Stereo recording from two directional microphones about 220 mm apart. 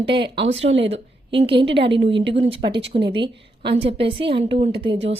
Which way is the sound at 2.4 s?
20° right (ahead or behind).